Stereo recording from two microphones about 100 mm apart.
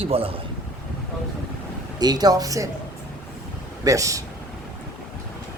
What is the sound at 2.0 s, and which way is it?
Speech, 40° right (ahead or behind).